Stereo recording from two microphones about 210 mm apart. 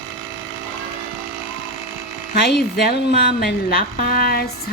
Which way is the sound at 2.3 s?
50° left (ahead or behind).